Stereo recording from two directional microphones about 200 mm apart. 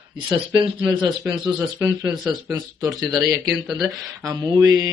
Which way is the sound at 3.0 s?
Centre (ahead or behind).